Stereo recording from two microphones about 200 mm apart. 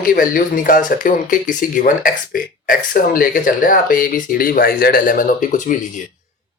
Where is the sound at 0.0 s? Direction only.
45° left (ahead or behind).